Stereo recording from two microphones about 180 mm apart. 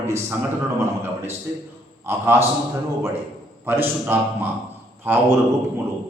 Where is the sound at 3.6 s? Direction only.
10° right (ahead or behind).